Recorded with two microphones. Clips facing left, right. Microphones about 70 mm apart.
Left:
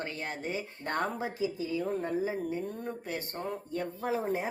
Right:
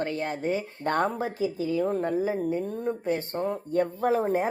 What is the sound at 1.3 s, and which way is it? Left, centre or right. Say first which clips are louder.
Speech: right 6 dB; right.